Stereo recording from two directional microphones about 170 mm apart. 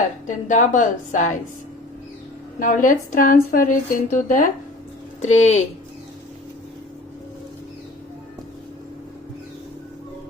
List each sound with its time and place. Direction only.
0.3 s a woman's voice: 45° left (ahead or behind)
2.6 s a woman's voice: 50° left (ahead or behind)